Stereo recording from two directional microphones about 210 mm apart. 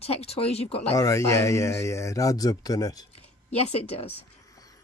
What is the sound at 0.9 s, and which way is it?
Speech, 15° left (ahead or behind).